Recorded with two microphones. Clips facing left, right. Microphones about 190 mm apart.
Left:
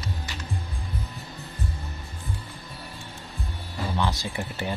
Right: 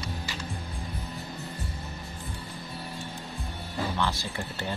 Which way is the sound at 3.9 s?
15° left (ahead or behind).